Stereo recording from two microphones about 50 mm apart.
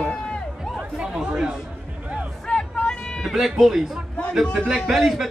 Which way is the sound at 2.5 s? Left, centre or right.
Centre.